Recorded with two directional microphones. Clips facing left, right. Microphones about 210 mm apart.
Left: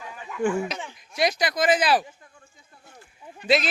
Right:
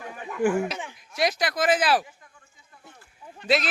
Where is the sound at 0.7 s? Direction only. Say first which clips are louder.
Even; 15° right (ahead or behind).